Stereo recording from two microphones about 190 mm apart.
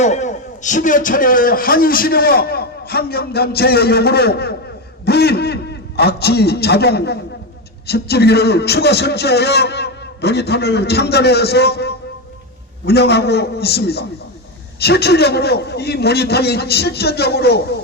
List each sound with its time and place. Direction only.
0.0 s a man's voice: 40° left (ahead or behind); by 17.7 s 60° left (ahead or behind)